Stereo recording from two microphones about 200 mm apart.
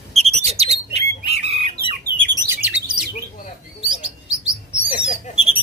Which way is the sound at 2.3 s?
10° right (ahead or behind).